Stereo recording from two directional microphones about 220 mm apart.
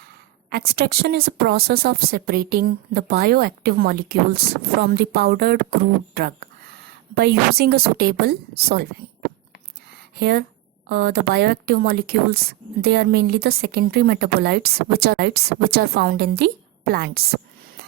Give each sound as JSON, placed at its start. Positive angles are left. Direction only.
{"t": 0.5, "sound": "a woman's voice", "side_deg": -45}
{"t": 10.2, "sound": "a woman's voice", "side_deg": -45}